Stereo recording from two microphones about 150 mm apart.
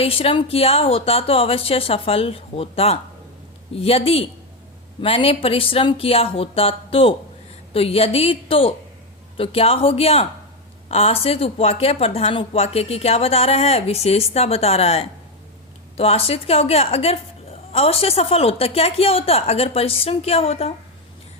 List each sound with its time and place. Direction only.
0.0 s a woman's voice: 40° left (ahead or behind)